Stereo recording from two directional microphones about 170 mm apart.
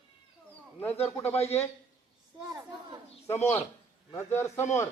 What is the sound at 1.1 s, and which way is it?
Speech, 15° left (ahead or behind).